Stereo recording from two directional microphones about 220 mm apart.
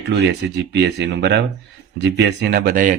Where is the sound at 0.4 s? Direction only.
50° right (ahead or behind).